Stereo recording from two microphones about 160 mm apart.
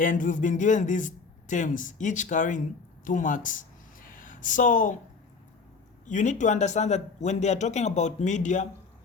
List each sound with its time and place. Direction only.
0.0 s speech: 55° left (ahead or behind)
3.0 s a sound: 55° left (ahead or behind)
6.1 s speech: 50° left (ahead or behind)